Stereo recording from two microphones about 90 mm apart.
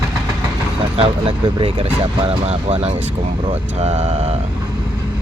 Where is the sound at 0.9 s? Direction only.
80° right.